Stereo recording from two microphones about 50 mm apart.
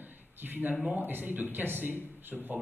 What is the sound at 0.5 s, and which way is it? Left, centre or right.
Speech, right.